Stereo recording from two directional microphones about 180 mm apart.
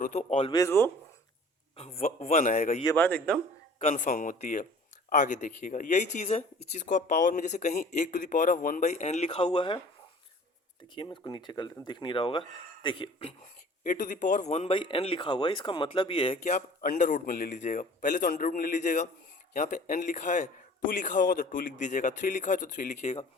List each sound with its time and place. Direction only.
0.0 s a man's voice: 40° left (ahead or behind)
0.5 s a man's voice: 15° left (ahead or behind)
1.7 s a man's voice: 35° left (ahead or behind)
2.9 s a man's voice: 10° left (ahead or behind)
3.8 s a man's voice: 40° left (ahead or behind)
7.7 s a man's voice: 55° left (ahead or behind); by 9.8 s 25° left (ahead or behind)
10.9 s speech: 25° left (ahead or behind)
13.8 s a man's voice: 50° left (ahead or behind)